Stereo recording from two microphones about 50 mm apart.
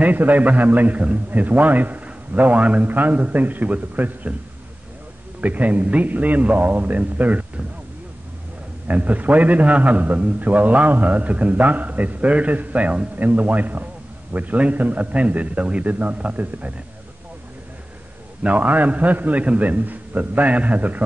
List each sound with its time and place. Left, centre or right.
0.0 s a man's voice: right
5.4 s a man's voice: right
8.8 s a man's voice: right
18.4 s a man's voice: right